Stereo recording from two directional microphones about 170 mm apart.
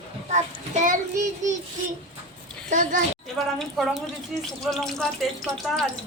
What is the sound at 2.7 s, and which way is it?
Speech, 50° right (ahead or behind).